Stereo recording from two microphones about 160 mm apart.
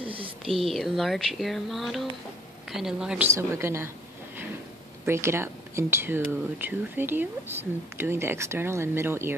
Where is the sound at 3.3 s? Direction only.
15° right (ahead or behind).